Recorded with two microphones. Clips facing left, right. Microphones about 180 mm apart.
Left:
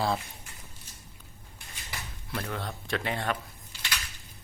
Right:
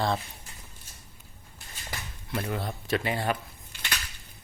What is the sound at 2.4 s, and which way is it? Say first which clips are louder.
Speech: right 3 dB; 10° right (ahead or behind).